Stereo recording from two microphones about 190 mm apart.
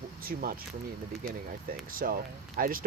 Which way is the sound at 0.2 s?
50° right (ahead or behind).